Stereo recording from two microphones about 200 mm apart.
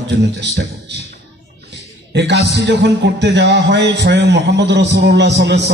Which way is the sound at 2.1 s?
60° right (ahead or behind).